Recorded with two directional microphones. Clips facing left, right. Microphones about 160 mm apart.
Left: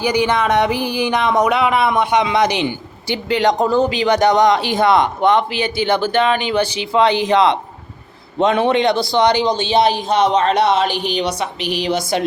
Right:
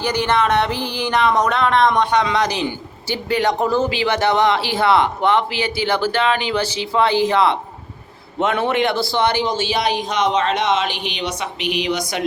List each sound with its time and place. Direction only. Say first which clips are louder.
0.0 s a man's voice: left 2 dB; 10° left (ahead or behind); by 12.2 s 35° left (ahead or behind)